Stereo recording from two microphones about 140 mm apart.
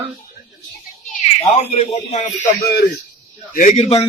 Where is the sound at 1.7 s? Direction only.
55° left (ahead or behind).